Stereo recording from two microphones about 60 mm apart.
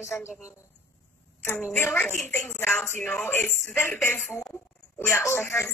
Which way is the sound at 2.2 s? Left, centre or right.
Left.